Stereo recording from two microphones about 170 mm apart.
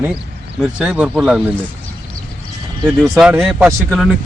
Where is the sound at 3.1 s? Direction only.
10° right (ahead or behind).